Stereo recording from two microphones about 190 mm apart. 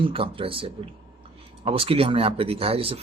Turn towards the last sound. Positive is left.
turn(degrees=-30)  # may be behind; listen again after turning